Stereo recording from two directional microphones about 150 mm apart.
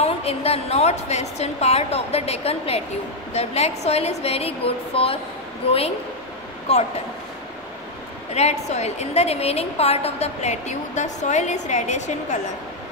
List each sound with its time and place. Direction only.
0.0 s a woman's voice: 40° left (ahead or behind)
8.4 s a woman's voice: 45° left (ahead or behind)